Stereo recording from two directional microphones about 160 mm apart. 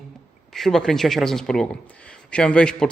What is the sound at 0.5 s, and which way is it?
A man's voice, centre (ahead or behind).